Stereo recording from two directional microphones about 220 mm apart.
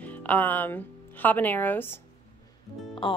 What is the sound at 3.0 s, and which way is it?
Speech, 20° left (ahead or behind).